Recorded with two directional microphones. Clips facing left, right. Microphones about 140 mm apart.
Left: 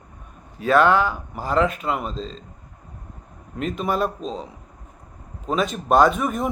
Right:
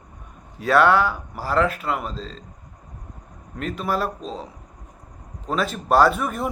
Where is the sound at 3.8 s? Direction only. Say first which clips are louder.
Left 1 dB; 20° left (ahead or behind).